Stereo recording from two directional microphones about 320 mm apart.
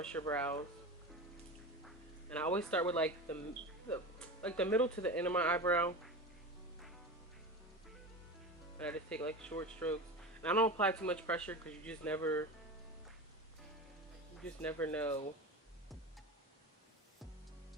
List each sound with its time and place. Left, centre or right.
0.0 s speech: centre
2.3 s speech: centre
8.8 s speech: centre
14.6 s speech: centre